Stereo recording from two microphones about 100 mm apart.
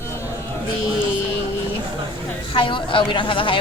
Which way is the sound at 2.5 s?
55° left (ahead or behind).